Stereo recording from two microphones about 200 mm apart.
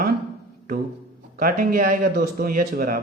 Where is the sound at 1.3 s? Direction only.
45° right (ahead or behind).